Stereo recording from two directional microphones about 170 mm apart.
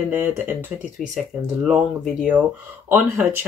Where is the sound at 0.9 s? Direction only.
Centre (ahead or behind).